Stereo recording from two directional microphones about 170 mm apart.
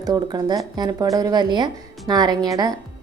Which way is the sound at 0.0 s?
25° right (ahead or behind).